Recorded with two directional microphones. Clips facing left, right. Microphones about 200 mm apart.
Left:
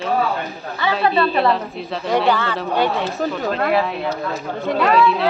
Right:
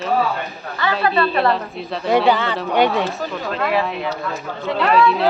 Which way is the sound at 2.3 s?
15° right (ahead or behind).